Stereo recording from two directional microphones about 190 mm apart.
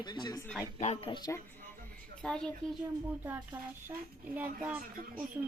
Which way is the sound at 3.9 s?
10° right (ahead or behind).